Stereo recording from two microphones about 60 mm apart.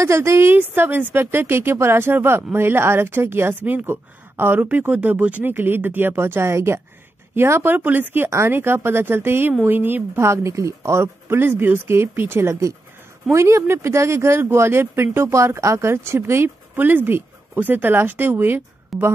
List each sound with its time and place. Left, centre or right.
0.0 s speech: right
0.6 s speech: right
7.7 s speech: right
8.3 s speech: right
10.2 s speech: right